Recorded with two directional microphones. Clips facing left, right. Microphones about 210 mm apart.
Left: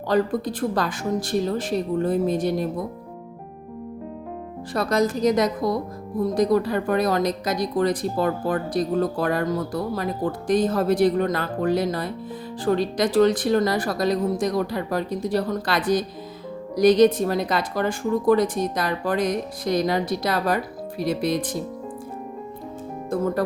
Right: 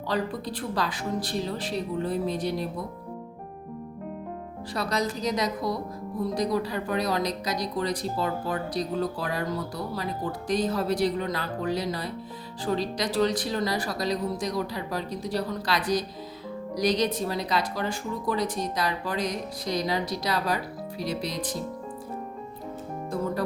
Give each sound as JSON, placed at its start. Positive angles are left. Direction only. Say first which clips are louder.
{"t": 0.1, "sound": "speech", "louder": "left 8 dB", "side_deg": 45}
{"t": 4.7, "sound": "speech", "louder": "left 7 dB", "side_deg": 50}